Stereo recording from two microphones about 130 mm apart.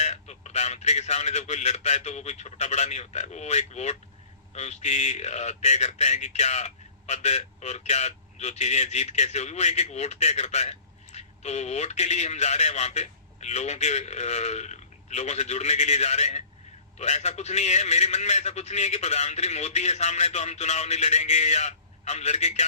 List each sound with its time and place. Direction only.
0.0 s speech: 60° left (ahead or behind)